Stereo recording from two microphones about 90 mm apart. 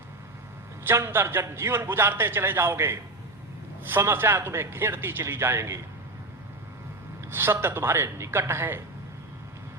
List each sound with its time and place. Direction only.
0.9 s a man's voice: 25° right (ahead or behind)
7.3 s a man's voice: 25° right (ahead or behind)